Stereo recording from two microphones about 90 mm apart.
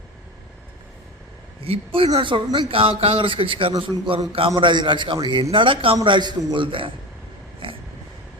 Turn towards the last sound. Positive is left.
turn(degrees=-75)  # may be behind; listen again after turning